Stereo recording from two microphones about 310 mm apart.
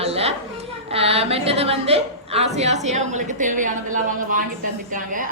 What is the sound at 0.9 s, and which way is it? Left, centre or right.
A woman's voice, centre.